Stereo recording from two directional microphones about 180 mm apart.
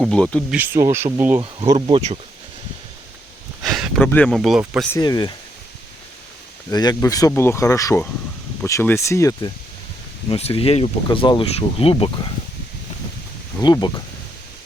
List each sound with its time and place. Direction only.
0.0 s speech: 5° left (ahead or behind)
0.5 s speech: 10° right (ahead or behind)
1.9 s speech: 35° right (ahead or behind)
3.6 s a sound: centre (ahead or behind)
4.0 s speech: 10° left (ahead or behind)
4.9 s speech: 20° left (ahead or behind)
6.7 s speech: 20° left (ahead or behind)
10.2 s speech: 35° left (ahead or behind)
13.6 s speech: 25° left (ahead or behind)